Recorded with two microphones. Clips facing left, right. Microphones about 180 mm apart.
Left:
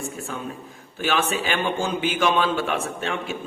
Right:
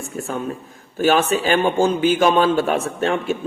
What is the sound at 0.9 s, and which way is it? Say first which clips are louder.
A man's voice: right 7 dB; 40° right (ahead or behind).